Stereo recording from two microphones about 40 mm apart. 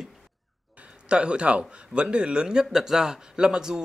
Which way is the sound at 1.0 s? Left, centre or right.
Right.